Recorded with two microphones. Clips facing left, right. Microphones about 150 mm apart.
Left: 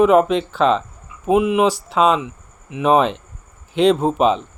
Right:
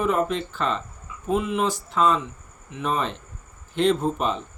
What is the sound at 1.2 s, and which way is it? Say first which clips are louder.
Speech: left 8 dB; 70° left (ahead or behind).